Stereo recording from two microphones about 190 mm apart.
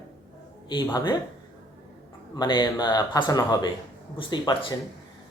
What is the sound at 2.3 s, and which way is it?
Speech, 20° left (ahead or behind).